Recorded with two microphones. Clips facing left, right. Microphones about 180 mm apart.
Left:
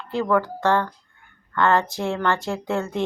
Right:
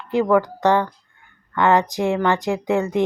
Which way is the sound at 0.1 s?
15° right (ahead or behind).